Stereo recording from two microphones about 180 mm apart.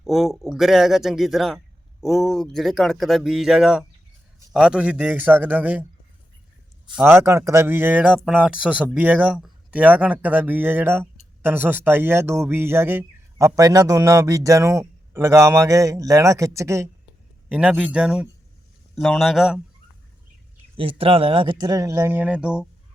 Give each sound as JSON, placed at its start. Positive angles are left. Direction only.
{"t": 0.0, "sound": "a man's voice", "side_deg": 0}
{"t": 6.8, "sound": "speech", "side_deg": -10}
{"t": 17.5, "sound": "a man's voice", "side_deg": -5}
{"t": 20.7, "sound": "speech", "side_deg": -30}